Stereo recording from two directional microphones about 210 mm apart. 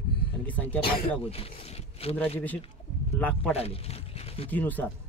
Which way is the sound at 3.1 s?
5° left (ahead or behind).